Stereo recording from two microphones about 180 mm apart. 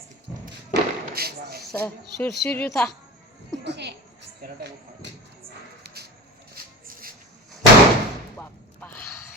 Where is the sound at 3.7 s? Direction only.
70° right (ahead or behind).